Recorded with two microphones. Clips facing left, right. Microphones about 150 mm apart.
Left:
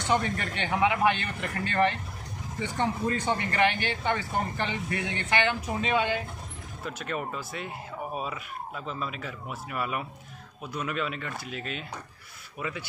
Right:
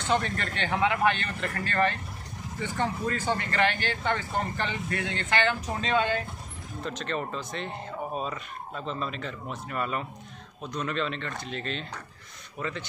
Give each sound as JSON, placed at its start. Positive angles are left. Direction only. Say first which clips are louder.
{"t": 0.0, "sound": "speech", "louder": "even", "side_deg": 15}